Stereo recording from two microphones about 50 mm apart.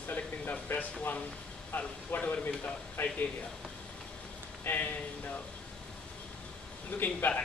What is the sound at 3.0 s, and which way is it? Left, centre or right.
Speech, left.